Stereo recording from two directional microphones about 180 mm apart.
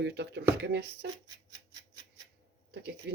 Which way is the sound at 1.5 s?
20° right (ahead or behind).